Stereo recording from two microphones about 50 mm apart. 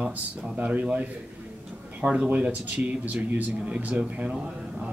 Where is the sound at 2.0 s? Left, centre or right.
Centre.